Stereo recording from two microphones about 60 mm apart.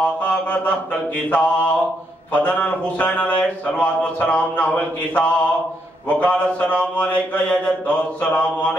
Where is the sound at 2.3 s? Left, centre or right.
Left.